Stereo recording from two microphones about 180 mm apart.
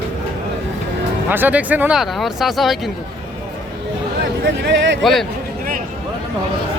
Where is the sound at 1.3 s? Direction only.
10° right (ahead or behind).